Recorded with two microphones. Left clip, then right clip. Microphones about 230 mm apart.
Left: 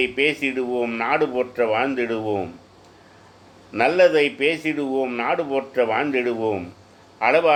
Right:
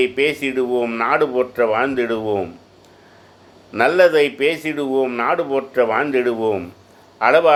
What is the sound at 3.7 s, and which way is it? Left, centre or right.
Speech, centre.